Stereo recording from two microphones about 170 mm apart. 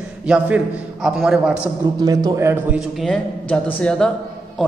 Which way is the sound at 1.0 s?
Centre (ahead or behind).